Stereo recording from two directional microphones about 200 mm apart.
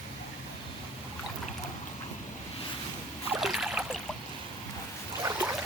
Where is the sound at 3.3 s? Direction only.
Centre (ahead or behind).